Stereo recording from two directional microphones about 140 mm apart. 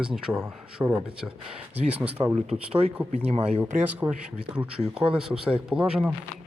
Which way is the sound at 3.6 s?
15° right (ahead or behind).